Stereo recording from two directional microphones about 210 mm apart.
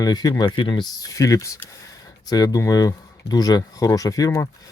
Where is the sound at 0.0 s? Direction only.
15° left (ahead or behind).